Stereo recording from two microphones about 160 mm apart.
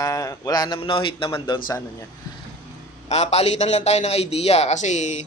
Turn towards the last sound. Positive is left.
turn(degrees=45)  # may be behind; listen again after turning